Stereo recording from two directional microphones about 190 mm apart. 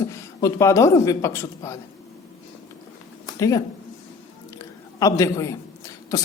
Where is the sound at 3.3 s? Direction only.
15° left (ahead or behind).